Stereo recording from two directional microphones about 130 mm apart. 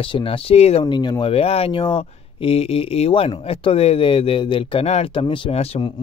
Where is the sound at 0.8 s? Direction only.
30° left (ahead or behind).